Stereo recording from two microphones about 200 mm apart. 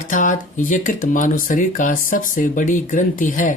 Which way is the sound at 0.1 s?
40° left (ahead or behind).